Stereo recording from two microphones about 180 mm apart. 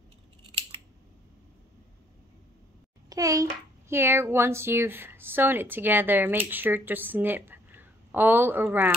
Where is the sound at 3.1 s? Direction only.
20° right (ahead or behind).